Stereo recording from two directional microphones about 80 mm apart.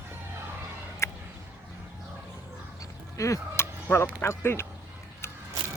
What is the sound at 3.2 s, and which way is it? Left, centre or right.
Speech, left.